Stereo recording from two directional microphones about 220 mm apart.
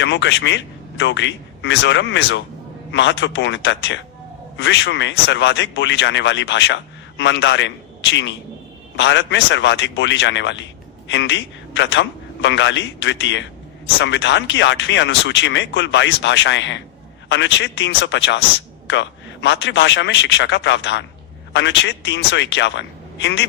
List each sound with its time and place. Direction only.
0.0 s speech: 55° left (ahead or behind)